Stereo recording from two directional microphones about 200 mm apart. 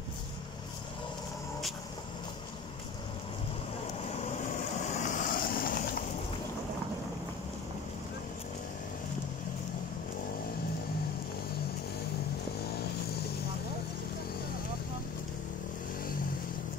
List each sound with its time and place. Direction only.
4.9 s vehicle: 40° left (ahead or behind)